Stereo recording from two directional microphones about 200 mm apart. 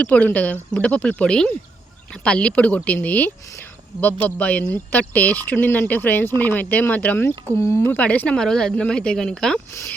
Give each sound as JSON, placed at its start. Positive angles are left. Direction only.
{"t": 0.0, "sound": "speech", "side_deg": 5}